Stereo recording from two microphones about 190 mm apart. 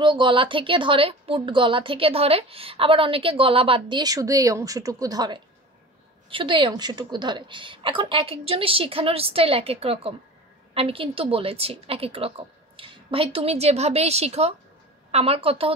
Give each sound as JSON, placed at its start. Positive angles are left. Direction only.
{"t": 0.0, "sound": "a woman's voice", "side_deg": -25}